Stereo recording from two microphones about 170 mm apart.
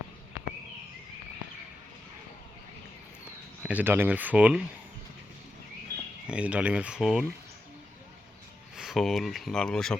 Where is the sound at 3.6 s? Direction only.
10° right (ahead or behind).